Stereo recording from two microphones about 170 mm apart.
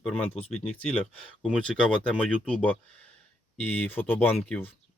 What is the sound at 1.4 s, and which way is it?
Speech, 5° left (ahead or behind).